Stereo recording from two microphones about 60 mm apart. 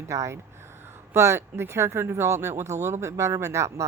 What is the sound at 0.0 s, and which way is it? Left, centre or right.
A woman's voice, right.